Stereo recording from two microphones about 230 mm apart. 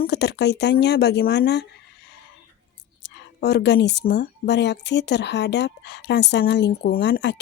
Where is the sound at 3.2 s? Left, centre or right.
Left.